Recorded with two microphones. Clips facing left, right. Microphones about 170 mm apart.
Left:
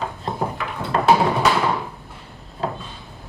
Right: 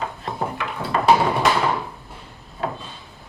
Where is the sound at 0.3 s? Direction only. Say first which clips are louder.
Right 1 dB; centre (ahead or behind).